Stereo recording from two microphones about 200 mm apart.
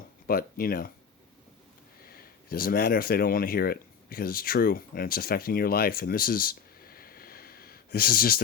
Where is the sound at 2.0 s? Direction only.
50° left (ahead or behind).